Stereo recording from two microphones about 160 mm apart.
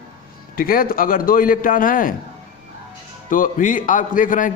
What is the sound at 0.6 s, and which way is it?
A man's voice, 65° left (ahead or behind).